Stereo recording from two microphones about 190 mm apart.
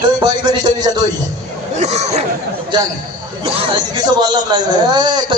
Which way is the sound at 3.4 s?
30° right (ahead or behind).